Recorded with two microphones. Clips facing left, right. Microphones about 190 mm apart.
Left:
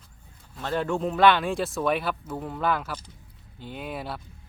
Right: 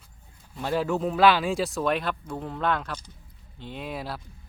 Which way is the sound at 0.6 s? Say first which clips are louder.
Right 1 dB; 10° right (ahead or behind).